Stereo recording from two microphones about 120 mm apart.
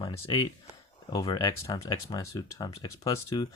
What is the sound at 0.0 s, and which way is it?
Speech, 45° left (ahead or behind).